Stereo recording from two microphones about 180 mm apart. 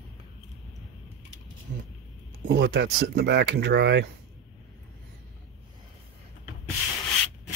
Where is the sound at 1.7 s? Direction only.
80° right.